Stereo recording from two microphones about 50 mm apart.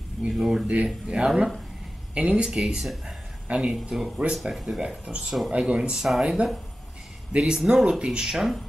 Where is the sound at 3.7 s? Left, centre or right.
Centre.